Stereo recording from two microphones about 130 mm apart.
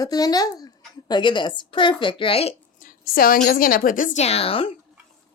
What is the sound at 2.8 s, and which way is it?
A woman's voice, 90° left.